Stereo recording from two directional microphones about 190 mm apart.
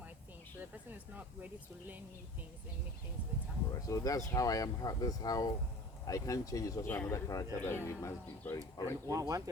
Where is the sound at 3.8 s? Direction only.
20° left (ahead or behind).